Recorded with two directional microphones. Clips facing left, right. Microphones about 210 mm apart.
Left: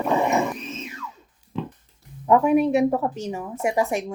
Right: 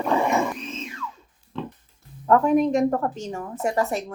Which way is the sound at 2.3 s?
10° left (ahead or behind).